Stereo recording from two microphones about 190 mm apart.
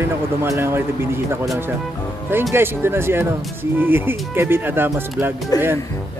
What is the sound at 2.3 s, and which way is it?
Speech, 10° right (ahead or behind).